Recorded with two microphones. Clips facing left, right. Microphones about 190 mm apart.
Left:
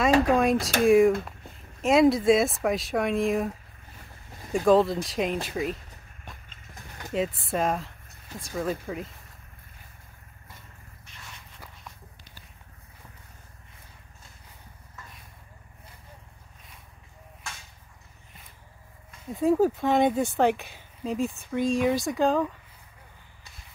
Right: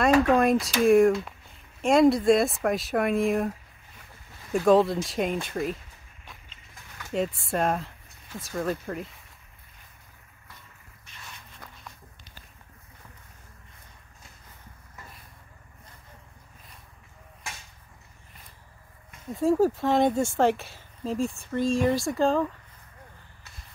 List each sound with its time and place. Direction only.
0.3 s speech: centre (ahead or behind)
4.6 s speech: centre (ahead or behind)
6.5 s a sound: 40° left (ahead or behind)
7.1 s speech: centre (ahead or behind)
19.2 s speech: 5° left (ahead or behind)